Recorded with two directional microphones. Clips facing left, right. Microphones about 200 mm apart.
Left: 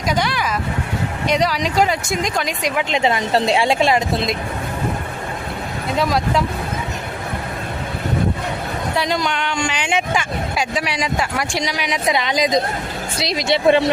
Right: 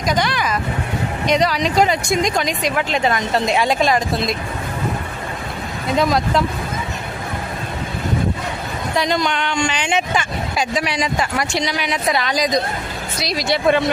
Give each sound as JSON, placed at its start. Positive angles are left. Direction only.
{"t": 0.1, "sound": "speech", "side_deg": 10}
{"t": 3.0, "sound": "a woman's voice", "side_deg": 30}
{"t": 6.0, "sound": "speech", "side_deg": 10}
{"t": 9.0, "sound": "a woman's voice", "side_deg": 5}